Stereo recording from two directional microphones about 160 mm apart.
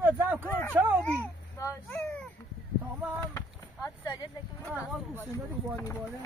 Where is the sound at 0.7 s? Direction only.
10° right (ahead or behind).